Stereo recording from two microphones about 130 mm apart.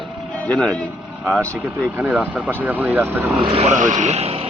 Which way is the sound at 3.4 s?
50° right (ahead or behind).